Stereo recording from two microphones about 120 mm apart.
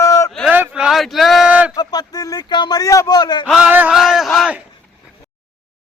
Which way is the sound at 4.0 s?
5° right (ahead or behind).